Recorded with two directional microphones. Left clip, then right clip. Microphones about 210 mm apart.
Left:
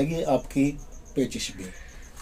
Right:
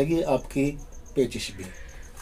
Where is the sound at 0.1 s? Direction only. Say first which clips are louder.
Right 1 dB; 10° right (ahead or behind).